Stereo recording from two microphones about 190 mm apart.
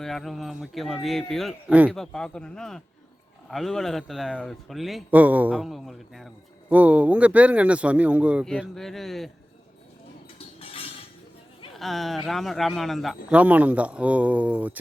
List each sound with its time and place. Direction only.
0.0 s a man's voice: centre (ahead or behind)
10.3 s a sound: 30° left (ahead or behind)
11.8 s a man's voice: centre (ahead or behind)